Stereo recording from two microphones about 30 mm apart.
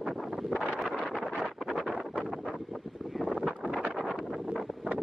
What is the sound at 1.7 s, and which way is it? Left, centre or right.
Wind noise, centre.